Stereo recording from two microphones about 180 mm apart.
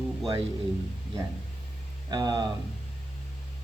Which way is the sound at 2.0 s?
25° right (ahead or behind).